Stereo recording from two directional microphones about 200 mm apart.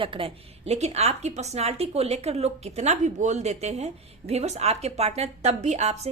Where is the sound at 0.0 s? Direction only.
25° right (ahead or behind).